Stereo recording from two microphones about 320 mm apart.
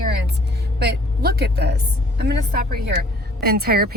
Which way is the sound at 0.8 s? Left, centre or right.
Right.